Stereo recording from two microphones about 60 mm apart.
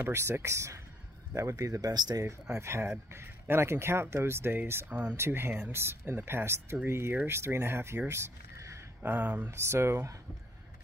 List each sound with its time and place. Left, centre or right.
0.1 s speech: right
2.2 s speech: right
8.1 s a sound: right
9.0 s speech: right
9.5 s speech: right